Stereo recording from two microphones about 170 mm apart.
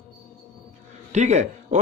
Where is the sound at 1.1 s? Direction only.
45° right (ahead or behind).